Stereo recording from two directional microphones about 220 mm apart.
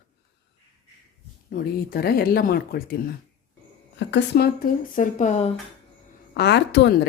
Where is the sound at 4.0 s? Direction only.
50° left (ahead or behind); by 5.5 s 30° left (ahead or behind).